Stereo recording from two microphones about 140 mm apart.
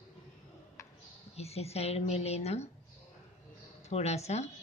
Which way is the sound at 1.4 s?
50° left (ahead or behind).